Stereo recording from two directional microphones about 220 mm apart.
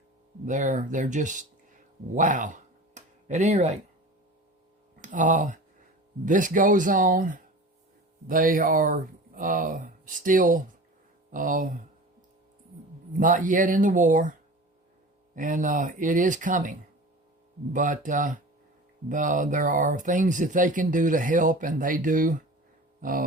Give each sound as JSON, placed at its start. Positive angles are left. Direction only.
{"t": 0.4, "sound": "speech", "side_deg": -35}
{"t": 2.1, "sound": "a sound", "side_deg": -35}
{"t": 4.9, "sound": "speech", "side_deg": -35}
{"t": 13.1, "sound": "speech", "side_deg": -35}
{"t": 15.4, "sound": "speech", "side_deg": -35}
{"t": 17.7, "sound": "speech", "side_deg": -35}